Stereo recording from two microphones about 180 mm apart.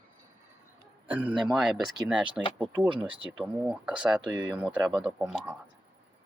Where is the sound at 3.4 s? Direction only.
5° right (ahead or behind).